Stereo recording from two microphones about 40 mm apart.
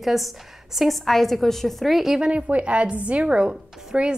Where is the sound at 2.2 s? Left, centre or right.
Right.